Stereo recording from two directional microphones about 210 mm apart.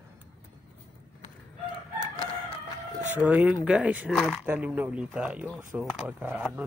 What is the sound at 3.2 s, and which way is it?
Speech, 5° right (ahead or behind).